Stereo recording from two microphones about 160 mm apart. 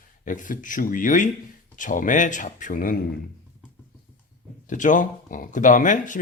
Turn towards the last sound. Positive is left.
turn(degrees=55)  # may be behind; listen again after turning